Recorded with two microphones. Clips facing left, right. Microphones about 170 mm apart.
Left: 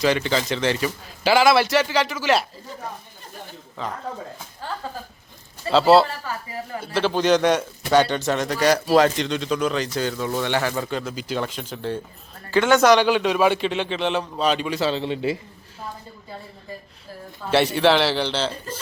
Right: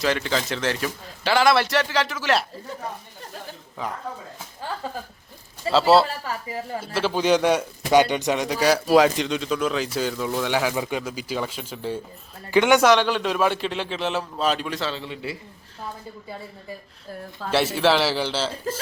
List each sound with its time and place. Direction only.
0.0 s a man's voice: centre (ahead or behind)
3.8 s speech: 10° right (ahead or behind)
5.6 s a man's voice: 5° right (ahead or behind)
12.8 s a man's voice: centre (ahead or behind)
14.8 s a man's voice: 25° left (ahead or behind)
17.5 s a man's voice: centre (ahead or behind)